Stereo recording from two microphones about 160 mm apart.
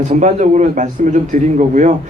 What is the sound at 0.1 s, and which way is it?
Speech, 50° right (ahead or behind).